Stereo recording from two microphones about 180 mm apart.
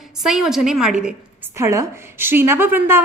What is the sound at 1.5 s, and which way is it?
A woman's voice, 15° right (ahead or behind).